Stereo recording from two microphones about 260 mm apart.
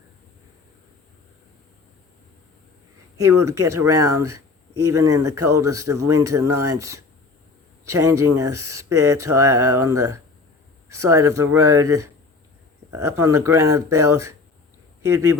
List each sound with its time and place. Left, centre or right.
3.2 s speech: centre
6.0 s speech: right
6.2 s speech: centre
8.2 s speech: centre